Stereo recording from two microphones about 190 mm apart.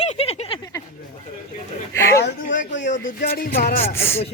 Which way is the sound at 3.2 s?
50° left (ahead or behind).